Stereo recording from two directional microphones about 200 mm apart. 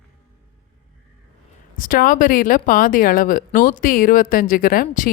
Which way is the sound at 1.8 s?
45° left (ahead or behind).